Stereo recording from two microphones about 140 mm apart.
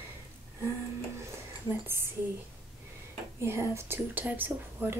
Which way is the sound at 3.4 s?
20° right (ahead or behind).